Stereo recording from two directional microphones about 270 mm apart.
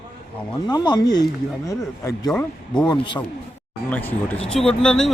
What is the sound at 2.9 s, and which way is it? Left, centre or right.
Speech, centre.